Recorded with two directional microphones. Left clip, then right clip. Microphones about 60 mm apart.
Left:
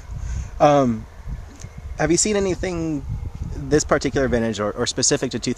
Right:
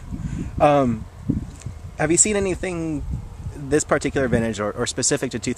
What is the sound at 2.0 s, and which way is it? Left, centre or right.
Speech, left.